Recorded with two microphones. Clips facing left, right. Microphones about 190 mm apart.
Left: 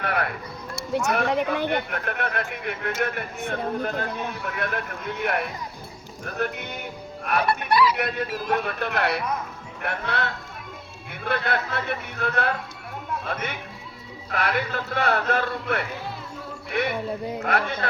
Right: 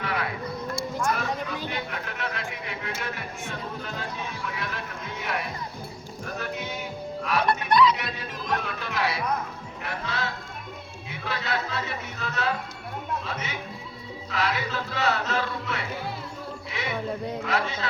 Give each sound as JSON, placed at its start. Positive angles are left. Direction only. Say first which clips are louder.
{"t": 0.0, "sound": "a sound", "louder": "left 3 dB", "side_deg": 55}
{"t": 1.0, "sound": "a man's voice", "louder": "left 6 dB", "side_deg": 65}
{"t": 7.7, "sound": "music", "louder": "right 1 dB", "side_deg": 5}
{"t": 7.9, "sound": "a man's voice", "louder": "left 8 dB", "side_deg": 55}